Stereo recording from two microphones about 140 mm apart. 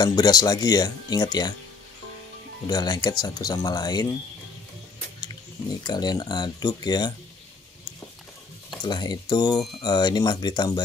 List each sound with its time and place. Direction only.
0.0 s speech: 30° left (ahead or behind)
2.6 s speech: 30° left (ahead or behind)
5.9 s speech: 30° left (ahead or behind)
8.8 s speech: 30° left (ahead or behind)